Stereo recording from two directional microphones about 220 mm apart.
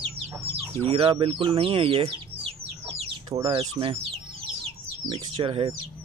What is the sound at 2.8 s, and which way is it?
Chicken, 25° right (ahead or behind).